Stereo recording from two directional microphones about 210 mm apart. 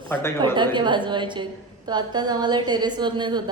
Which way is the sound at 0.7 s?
20° right (ahead or behind).